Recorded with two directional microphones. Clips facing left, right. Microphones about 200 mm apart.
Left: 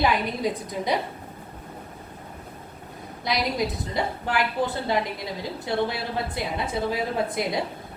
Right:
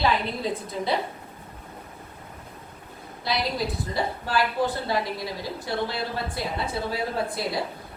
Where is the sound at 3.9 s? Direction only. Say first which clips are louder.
Even; 20° left (ahead or behind).